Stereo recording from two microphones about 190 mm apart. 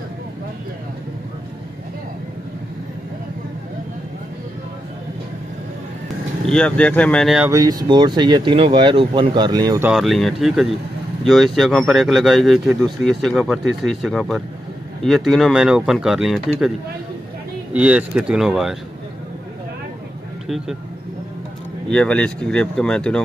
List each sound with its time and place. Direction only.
6.5 s speech: 5° left (ahead or behind)
7.5 s speech: 20° right (ahead or behind)
9.8 s speech: centre (ahead or behind)
17.7 s speech: 5° right (ahead or behind)
20.4 s speech: centre (ahead or behind)
21.9 s speech: 5° left (ahead or behind)